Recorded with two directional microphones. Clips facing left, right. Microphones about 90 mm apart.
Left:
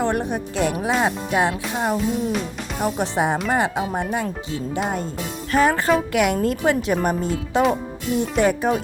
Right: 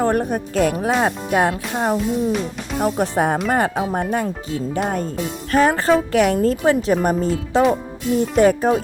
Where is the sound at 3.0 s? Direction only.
45° right (ahead or behind).